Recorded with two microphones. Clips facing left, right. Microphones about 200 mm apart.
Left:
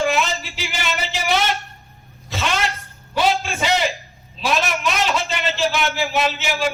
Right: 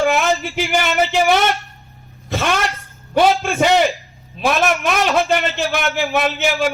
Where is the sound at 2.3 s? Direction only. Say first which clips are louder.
Right 5 dB; 55° right (ahead or behind).